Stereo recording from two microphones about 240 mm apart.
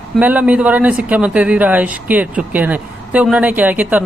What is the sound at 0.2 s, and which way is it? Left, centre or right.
Speech, centre.